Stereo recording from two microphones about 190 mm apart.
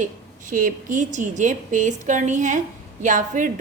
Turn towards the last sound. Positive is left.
turn(degrees=-40)  # may be behind; listen again after turning